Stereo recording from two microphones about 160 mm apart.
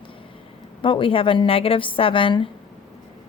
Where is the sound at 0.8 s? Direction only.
30° left (ahead or behind).